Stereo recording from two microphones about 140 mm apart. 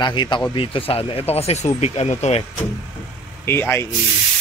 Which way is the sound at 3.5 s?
15° left (ahead or behind).